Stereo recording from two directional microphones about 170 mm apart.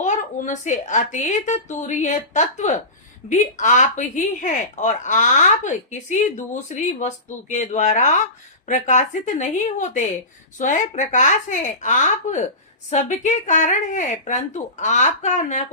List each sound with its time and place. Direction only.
0.0 s a woman's voice: 45° left (ahead or behind)